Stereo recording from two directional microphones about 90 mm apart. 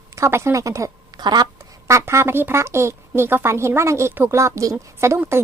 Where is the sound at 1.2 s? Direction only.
50° right (ahead or behind).